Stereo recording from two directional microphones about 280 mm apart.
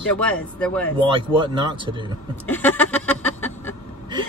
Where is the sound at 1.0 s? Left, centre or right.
Centre.